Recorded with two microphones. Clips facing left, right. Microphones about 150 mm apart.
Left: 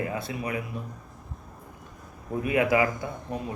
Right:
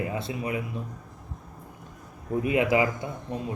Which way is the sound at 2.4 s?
25° right (ahead or behind).